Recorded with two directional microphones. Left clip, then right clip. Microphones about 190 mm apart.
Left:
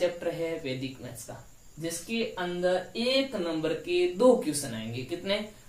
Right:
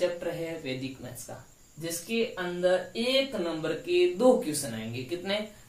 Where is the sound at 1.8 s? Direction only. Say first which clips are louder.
Right 2 dB; 15° left (ahead or behind).